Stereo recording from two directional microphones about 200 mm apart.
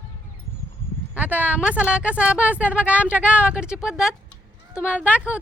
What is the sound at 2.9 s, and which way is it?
Speech, 10° left (ahead or behind).